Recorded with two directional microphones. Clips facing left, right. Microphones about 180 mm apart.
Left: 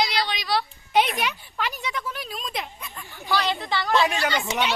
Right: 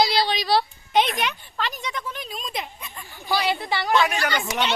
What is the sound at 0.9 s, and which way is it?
Speech, centre (ahead or behind).